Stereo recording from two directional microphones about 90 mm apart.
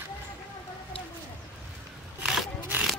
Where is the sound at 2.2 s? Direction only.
5° right (ahead or behind).